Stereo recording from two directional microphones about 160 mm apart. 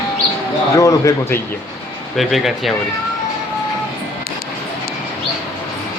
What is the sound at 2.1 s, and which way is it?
Speech, centre (ahead or behind).